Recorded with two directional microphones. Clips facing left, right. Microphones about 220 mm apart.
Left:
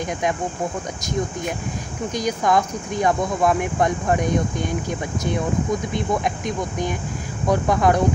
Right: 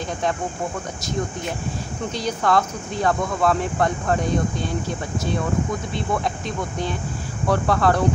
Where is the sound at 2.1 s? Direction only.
15° left (ahead or behind).